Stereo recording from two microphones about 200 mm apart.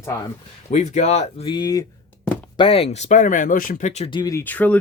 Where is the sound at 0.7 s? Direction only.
35° left (ahead or behind).